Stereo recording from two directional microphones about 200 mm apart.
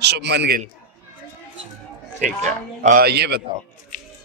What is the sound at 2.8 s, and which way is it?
Speech, 50° right (ahead or behind).